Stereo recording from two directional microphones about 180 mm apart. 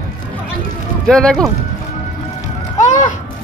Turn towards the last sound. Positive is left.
turn(degrees=45)  # may be behind; listen again after turning